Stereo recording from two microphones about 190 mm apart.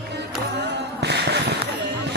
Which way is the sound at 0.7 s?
60° right (ahead or behind).